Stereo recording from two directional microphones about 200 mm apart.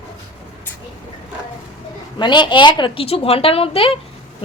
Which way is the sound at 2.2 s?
20° left (ahead or behind).